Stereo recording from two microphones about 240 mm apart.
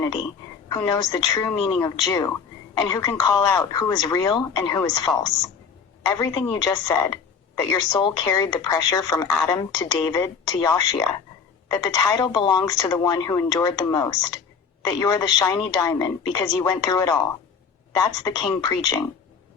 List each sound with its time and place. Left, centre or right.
0.7 s a woman's voice: centre